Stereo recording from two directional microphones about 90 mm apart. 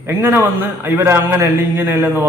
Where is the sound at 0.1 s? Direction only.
25° right (ahead or behind).